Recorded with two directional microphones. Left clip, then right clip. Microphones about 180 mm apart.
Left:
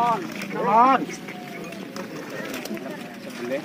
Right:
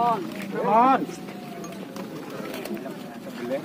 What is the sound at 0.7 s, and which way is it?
Speech, 5° right (ahead or behind).